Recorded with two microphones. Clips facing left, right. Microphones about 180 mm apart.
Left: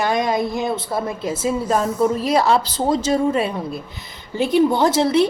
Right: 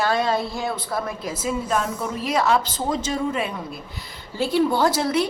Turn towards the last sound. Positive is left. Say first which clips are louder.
# left 4 dB
turn(degrees=25)  # may be behind; listen again after turning